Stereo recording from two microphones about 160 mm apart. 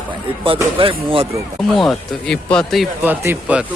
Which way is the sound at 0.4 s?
35° right (ahead or behind).